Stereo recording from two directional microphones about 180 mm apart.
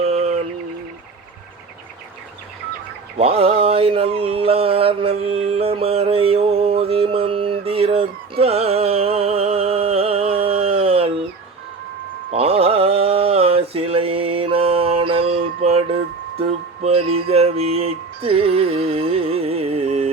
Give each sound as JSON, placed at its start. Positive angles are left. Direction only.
{"t": 0.0, "sound": "a sound", "side_deg": -35}
{"t": 3.2, "sound": "mantra", "side_deg": -30}
{"t": 12.3, "sound": "mantra", "side_deg": -30}
{"t": 16.4, "sound": "music", "side_deg": -30}